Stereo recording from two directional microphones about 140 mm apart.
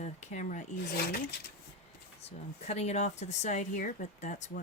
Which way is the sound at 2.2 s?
50° left (ahead or behind).